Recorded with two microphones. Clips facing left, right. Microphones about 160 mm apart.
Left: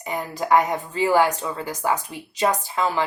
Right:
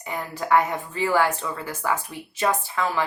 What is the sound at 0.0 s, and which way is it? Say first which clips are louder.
A woman's voice: left 3 dB; 20° left (ahead or behind).